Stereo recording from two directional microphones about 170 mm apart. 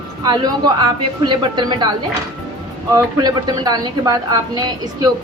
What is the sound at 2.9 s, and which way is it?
A woman's voice, 25° right (ahead or behind).